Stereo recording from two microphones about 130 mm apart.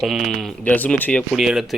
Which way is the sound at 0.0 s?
Centre (ahead or behind).